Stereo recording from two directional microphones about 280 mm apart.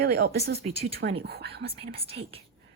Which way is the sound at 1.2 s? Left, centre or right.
Right.